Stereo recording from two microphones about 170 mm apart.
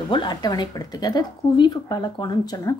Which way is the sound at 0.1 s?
25° left (ahead or behind).